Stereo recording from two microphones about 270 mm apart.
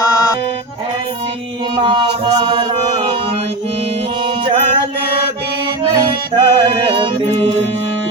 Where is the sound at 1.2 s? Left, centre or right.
Centre.